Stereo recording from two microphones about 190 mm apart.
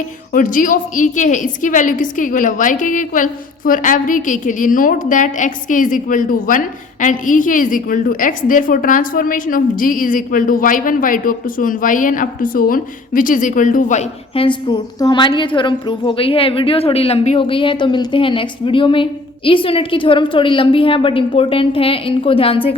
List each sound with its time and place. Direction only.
0.3 s a woman's voice: 45° left (ahead or behind)
14.3 s a woman's voice: 25° left (ahead or behind)